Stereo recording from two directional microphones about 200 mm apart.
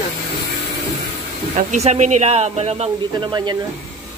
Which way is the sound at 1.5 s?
35° right (ahead or behind).